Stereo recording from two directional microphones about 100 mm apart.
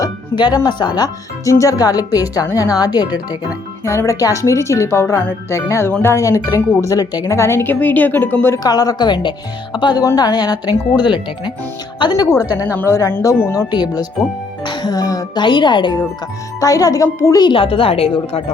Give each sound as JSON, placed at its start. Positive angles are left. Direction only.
{"t": 0.3, "sound": "speech", "side_deg": 45}
{"t": 3.8, "sound": "speech", "side_deg": 30}
{"t": 6.8, "sound": "speech", "side_deg": 35}
{"t": 7.3, "sound": "speech", "side_deg": 25}
{"t": 8.5, "sound": "speech", "side_deg": 40}
{"t": 12.5, "sound": "speech", "side_deg": 20}
{"t": 13.7, "sound": "speech", "side_deg": 45}
{"t": 15.4, "sound": "speech", "side_deg": 50}
{"t": 16.6, "sound": "speech", "side_deg": 35}
{"t": 17.4, "sound": "a woman's voice", "side_deg": 65}